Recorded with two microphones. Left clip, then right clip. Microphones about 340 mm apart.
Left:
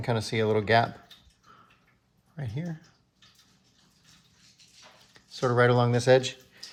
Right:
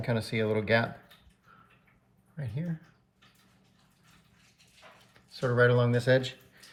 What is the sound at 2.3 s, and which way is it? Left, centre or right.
Speech, left.